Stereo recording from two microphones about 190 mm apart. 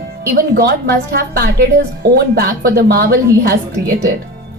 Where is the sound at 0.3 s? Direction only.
50° right (ahead or behind).